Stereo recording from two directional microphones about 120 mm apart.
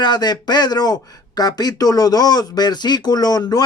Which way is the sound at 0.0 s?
35° left (ahead or behind).